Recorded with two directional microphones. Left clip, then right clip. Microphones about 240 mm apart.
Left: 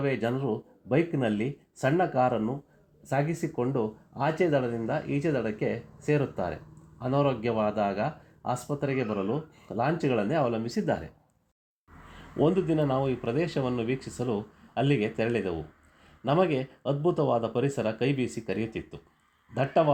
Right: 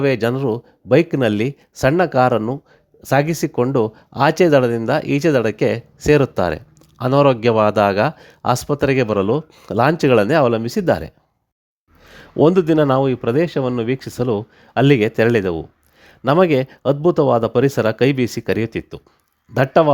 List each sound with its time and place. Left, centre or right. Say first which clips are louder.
0.0 s speech: right 11 dB; right
12.4 s speech: right 12 dB; right